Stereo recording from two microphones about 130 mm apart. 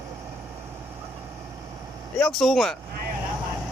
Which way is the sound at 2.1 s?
5° left (ahead or behind).